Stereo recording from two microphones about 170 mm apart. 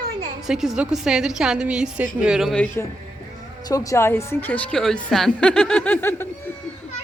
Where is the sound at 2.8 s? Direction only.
10° left (ahead or behind).